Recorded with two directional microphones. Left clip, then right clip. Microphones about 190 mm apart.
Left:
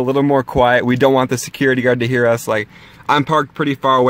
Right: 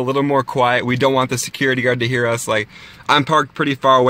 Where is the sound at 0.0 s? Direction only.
25° left (ahead or behind).